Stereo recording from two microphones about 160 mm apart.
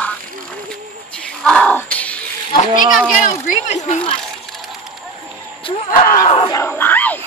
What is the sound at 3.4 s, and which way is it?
Speech, 55° left (ahead or behind).